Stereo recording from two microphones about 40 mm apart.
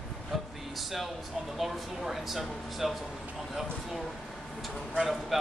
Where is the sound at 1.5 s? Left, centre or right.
Centre.